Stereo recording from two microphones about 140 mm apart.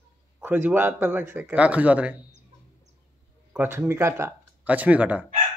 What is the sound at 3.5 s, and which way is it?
Speech, 10° right (ahead or behind).